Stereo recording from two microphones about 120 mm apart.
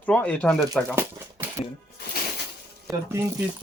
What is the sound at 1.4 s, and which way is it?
Music, 15° right (ahead or behind).